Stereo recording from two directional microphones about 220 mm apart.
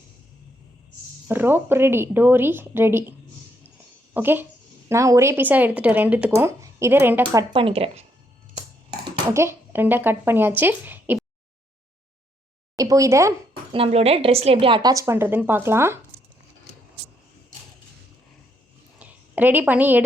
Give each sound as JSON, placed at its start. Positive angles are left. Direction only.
{"t": 1.3, "sound": "speech", "side_deg": -10}
{"t": 7.5, "sound": "a woman's voice", "side_deg": -25}
{"t": 9.3, "sound": "speech", "side_deg": -10}
{"t": 12.7, "sound": "a woman's voice", "side_deg": -15}
{"t": 13.7, "sound": "a woman's voice", "side_deg": -25}
{"t": 18.9, "sound": "a sound", "side_deg": -5}